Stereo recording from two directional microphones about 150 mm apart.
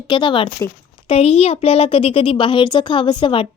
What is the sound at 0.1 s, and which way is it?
A child's voice, 30° left (ahead or behind).